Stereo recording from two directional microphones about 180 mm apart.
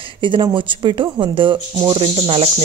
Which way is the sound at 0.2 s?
25° right (ahead or behind).